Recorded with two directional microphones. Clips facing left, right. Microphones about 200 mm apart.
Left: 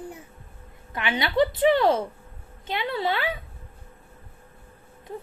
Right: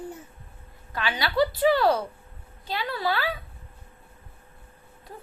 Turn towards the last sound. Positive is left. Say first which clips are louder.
# left 1 dB
turn(degrees=20)  # may be behind; listen again after turning